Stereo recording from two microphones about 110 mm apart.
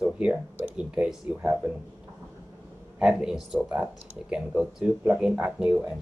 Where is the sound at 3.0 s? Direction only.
5° right (ahead or behind).